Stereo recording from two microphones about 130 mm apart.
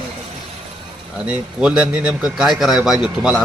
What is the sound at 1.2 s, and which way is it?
A man's voice, 10° right (ahead or behind).